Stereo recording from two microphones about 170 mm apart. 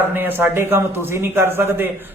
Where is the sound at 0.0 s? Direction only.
10° right (ahead or behind).